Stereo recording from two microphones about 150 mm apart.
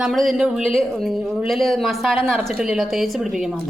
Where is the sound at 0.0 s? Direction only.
Centre (ahead or behind).